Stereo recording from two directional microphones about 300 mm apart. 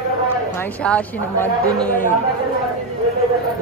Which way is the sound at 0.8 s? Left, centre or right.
Centre.